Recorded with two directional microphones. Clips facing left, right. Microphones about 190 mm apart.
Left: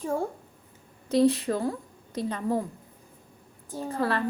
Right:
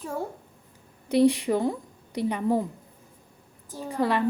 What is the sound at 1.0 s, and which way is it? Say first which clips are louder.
A woman's voice: right 1 dB; 15° right (ahead or behind).